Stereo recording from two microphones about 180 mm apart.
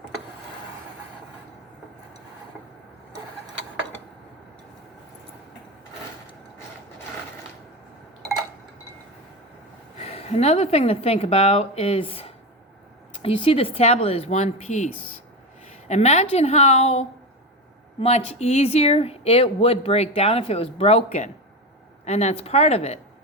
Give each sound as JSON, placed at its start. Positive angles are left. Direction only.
{"t": 10.0, "sound": "speech", "side_deg": 35}
{"t": 15.9, "sound": "speech", "side_deg": 40}